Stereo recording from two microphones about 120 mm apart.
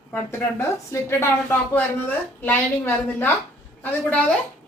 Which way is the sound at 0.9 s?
25° left (ahead or behind).